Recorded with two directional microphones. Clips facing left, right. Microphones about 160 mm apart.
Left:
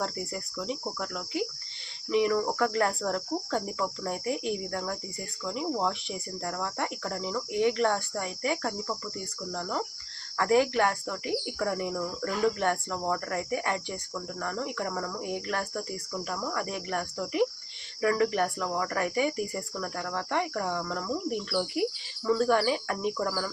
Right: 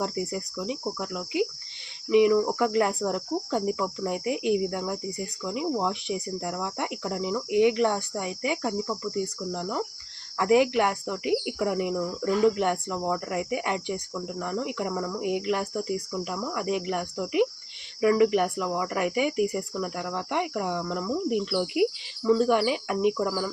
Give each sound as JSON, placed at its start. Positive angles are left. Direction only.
{"t": 0.0, "sound": "cricket", "side_deg": -15}